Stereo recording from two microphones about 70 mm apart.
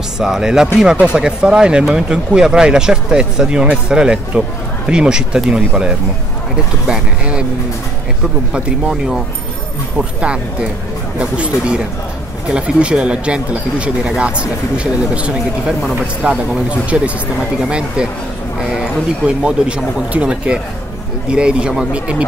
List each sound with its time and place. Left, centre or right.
0.2 s speech: centre
8.5 s speech: centre